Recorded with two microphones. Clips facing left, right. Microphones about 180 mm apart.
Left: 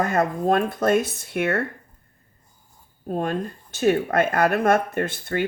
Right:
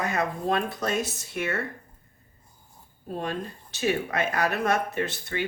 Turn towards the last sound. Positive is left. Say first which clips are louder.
# left 5 dB
turn(degrees=50)  # may be behind; listen again after turning